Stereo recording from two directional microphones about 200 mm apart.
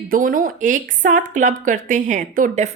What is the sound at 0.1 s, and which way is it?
Speech, 45° right (ahead or behind).